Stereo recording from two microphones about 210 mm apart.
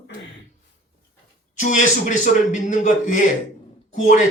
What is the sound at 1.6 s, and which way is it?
Speech, 35° left (ahead or behind).